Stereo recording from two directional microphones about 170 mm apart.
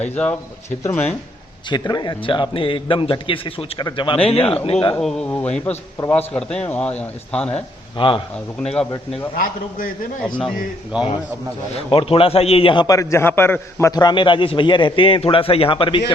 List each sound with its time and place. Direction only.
0.0 s a man's voice: 10° left (ahead or behind); by 4.9 s 35° left (ahead or behind)
4.9 s a man's voice: 5° left (ahead or behind)
7.9 s a man's voice: 30° left (ahead or behind)
8.6 s speech: 5° left (ahead or behind)
9.4 s a man's voice: 55° left (ahead or behind)
10.2 s speech: centre (ahead or behind)
11.7 s a man's voice: 35° left (ahead or behind)